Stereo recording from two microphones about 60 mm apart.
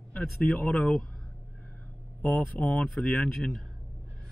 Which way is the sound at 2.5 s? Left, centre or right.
Left.